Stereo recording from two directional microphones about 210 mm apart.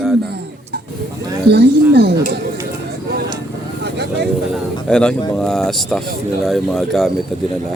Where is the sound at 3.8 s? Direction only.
55° right (ahead or behind).